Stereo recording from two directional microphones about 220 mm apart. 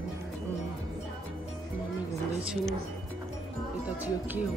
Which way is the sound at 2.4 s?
5° right (ahead or behind).